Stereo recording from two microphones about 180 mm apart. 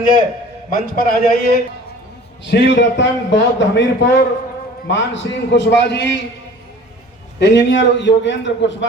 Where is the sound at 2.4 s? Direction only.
75° left (ahead or behind).